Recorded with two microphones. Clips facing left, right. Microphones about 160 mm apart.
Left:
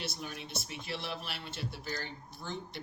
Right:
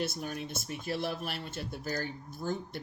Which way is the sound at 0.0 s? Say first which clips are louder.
Right 6 dB; 45° right (ahead or behind).